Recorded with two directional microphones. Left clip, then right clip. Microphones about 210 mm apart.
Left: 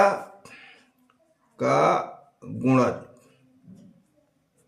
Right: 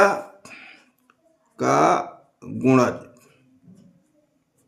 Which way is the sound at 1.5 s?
35° right (ahead or behind).